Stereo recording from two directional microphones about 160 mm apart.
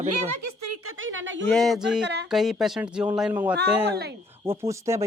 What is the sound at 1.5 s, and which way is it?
Speech, centre (ahead or behind).